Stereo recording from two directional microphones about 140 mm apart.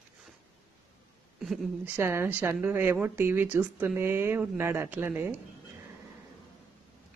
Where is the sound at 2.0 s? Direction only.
20° right (ahead or behind).